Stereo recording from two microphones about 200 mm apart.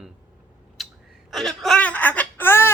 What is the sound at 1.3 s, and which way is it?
Wail, centre (ahead or behind).